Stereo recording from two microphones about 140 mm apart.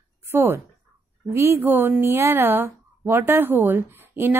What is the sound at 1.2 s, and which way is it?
Speech, 15° right (ahead or behind).